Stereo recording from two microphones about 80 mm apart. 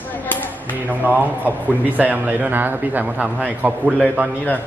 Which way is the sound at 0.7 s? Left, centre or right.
Right.